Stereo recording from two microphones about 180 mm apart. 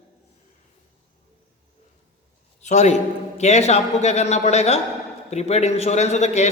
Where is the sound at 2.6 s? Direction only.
40° left (ahead or behind).